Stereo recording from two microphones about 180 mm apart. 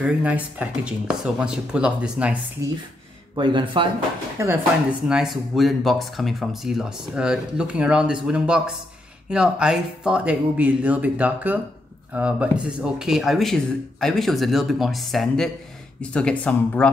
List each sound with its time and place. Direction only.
0.0 s speech: 10° right (ahead or behind)
3.3 s speech: 25° right (ahead or behind)
4.4 s speech: 15° right (ahead or behind)
5.0 s speech: 5° right (ahead or behind)